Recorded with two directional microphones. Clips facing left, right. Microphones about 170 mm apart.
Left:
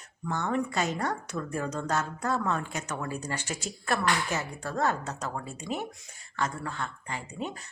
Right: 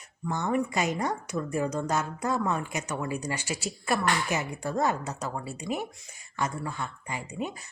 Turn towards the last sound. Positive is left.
turn(degrees=-10)  # may be behind; listen again after turning